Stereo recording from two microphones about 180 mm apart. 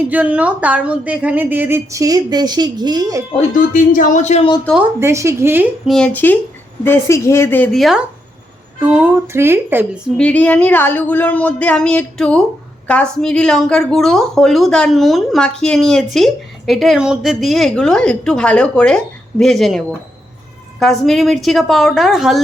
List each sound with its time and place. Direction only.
0.1 s speech: 10° right (ahead or behind)
3.5 s speech: 45° left (ahead or behind)
4.9 s speech: 15° right (ahead or behind)
5.9 s speech: 5° left (ahead or behind); by 10.0 s 10° right (ahead or behind)
10.2 s a woman's voice: 10° left (ahead or behind)